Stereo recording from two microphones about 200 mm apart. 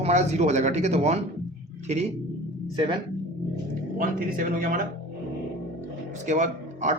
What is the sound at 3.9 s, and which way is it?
Speech, 45° right (ahead or behind).